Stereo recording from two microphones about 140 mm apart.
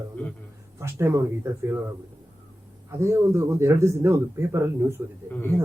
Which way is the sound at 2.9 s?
20° right (ahead or behind).